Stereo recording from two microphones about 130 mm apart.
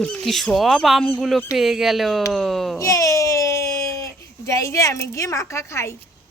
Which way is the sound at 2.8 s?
25° left (ahead or behind).